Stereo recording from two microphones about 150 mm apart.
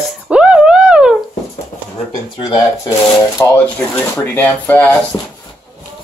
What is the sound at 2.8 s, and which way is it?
Speech, 20° left (ahead or behind).